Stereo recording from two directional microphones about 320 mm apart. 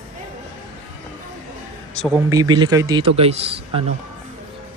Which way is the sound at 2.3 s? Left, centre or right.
Centre.